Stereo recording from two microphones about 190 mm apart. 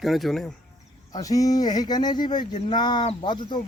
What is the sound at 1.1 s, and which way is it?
Speech, 20° left (ahead or behind).